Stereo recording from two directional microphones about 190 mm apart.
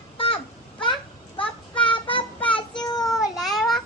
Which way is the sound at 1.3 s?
25° left (ahead or behind).